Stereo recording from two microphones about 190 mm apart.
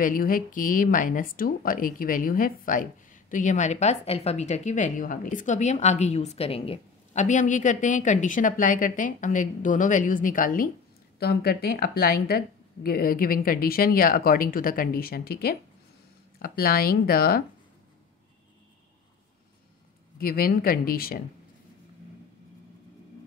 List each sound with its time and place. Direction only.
0.0 s speech: 45° left (ahead or behind)
20.2 s speech: 50° left (ahead or behind)